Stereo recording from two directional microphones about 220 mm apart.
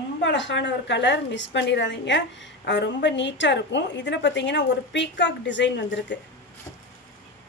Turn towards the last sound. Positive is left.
turn(degrees=55)  # may be behind; listen again after turning